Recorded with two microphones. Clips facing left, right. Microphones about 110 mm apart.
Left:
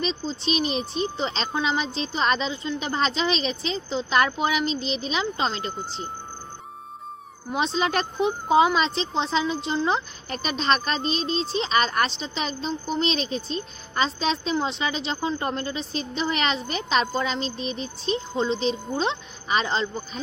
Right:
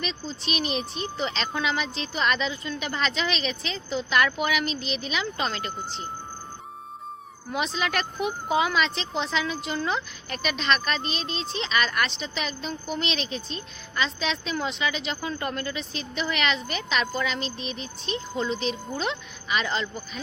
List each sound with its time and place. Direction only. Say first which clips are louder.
0.0 s speech: left 5 dB; 30° left (ahead or behind)
7.5 s speech: left 4 dB; 30° left (ahead or behind)